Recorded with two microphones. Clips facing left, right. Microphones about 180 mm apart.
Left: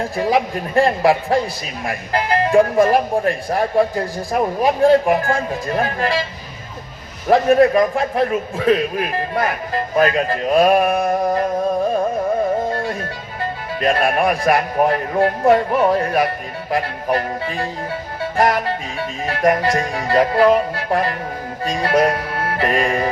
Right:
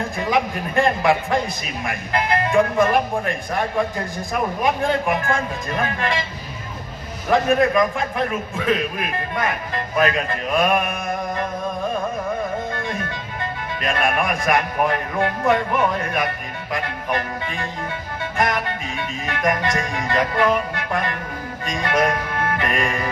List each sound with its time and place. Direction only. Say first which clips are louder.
0.0 s a man's voice: left 3 dB; 35° left (ahead or behind)
7.3 s a man's voice: left 5 dB; 35° left (ahead or behind)
12.7 s a man's voice: left 3 dB; 35° left (ahead or behind)
21.6 s music: left 4 dB; 35° left (ahead or behind)